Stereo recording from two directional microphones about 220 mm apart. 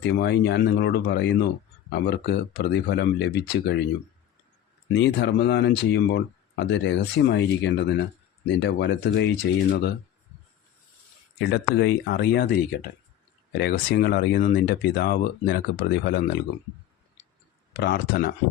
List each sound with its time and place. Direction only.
0.0 s speech: 50° left (ahead or behind)
4.9 s speech: 50° left (ahead or behind)
11.3 s speech: 50° left (ahead or behind)
17.7 s speech: 45° left (ahead or behind)